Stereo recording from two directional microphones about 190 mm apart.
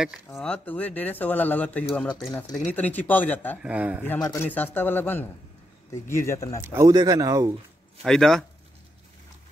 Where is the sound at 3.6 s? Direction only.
5° right (ahead or behind).